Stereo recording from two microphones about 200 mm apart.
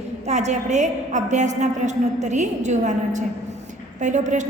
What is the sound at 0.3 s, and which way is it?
A woman's voice, 35° right (ahead or behind).